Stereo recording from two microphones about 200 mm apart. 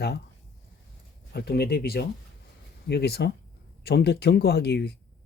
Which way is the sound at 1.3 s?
50° left (ahead or behind).